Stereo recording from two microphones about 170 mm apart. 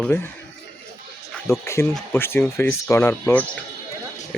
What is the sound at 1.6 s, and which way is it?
Speech, 15° left (ahead or behind).